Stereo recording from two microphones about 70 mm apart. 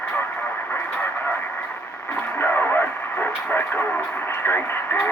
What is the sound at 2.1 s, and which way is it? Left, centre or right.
Radio, left.